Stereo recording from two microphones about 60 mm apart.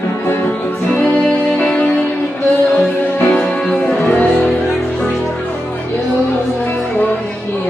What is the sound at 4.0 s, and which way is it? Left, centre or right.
Music, left.